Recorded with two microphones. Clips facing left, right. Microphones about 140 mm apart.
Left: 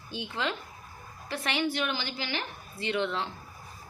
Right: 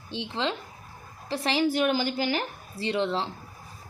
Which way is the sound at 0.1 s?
25° right (ahead or behind).